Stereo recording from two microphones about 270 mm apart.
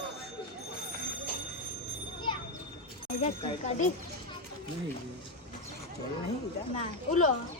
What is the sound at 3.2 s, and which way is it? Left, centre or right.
Speech, left.